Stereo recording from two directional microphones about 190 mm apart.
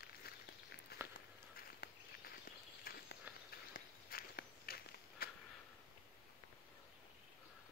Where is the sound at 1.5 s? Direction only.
50° left (ahead or behind).